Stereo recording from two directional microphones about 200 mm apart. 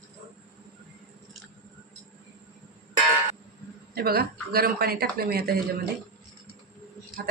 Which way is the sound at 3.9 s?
50° right (ahead or behind).